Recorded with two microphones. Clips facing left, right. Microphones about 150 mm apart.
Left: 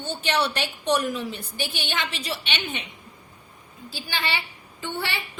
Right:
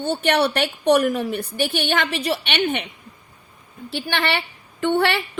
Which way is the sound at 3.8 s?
65° right (ahead or behind).